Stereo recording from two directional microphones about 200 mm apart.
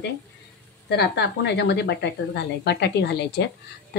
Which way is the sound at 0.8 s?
55° left (ahead or behind).